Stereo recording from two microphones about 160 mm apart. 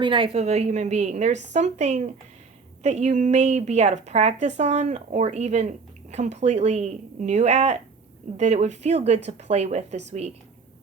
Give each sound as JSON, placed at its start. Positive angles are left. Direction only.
{"t": 0.0, "sound": "a woman's voice", "side_deg": -30}